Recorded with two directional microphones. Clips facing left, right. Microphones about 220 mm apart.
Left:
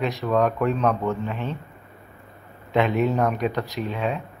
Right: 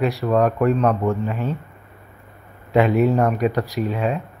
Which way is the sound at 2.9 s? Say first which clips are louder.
Right 5 dB; 40° right (ahead or behind).